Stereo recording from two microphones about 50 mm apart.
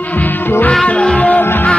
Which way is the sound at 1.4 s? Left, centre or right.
Left.